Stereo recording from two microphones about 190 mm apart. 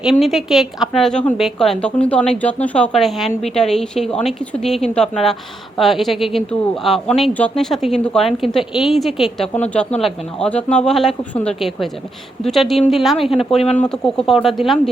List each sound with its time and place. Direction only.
0.0 s a woman's voice: centre (ahead or behind)
13.6 s speech: 35° left (ahead or behind)
13.8 s a woman's voice: 5° left (ahead or behind)